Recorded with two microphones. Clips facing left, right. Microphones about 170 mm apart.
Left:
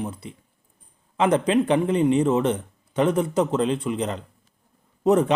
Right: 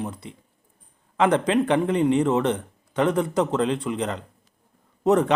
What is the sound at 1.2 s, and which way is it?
Speech, 20° left (ahead or behind).